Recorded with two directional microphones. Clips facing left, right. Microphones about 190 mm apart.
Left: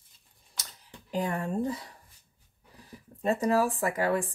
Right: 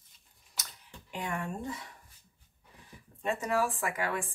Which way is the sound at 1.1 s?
35° left (ahead or behind).